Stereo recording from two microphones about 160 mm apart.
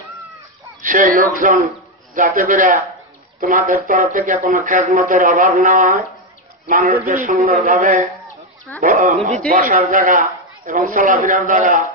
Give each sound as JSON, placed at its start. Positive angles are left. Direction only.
{"t": 0.8, "sound": "speech", "side_deg": -55}